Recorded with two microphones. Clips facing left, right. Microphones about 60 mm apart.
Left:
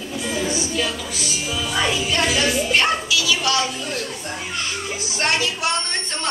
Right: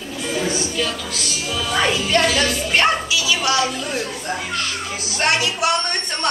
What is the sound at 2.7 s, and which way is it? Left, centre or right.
Speech, right.